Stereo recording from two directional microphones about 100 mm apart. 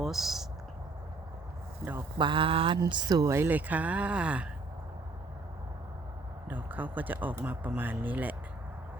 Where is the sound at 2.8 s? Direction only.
50° right (ahead or behind).